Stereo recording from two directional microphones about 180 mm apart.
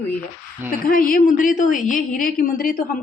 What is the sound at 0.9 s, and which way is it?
Speech, 50° left (ahead or behind).